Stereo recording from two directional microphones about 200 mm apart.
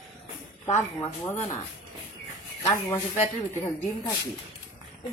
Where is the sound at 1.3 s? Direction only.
35° left (ahead or behind).